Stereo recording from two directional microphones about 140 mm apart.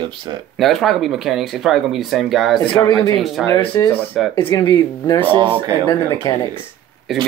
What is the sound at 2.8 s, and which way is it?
Speech, 35° left (ahead or behind).